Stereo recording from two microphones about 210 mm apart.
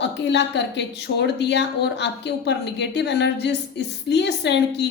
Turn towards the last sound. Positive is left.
turn(degrees=55)  # may be behind; listen again after turning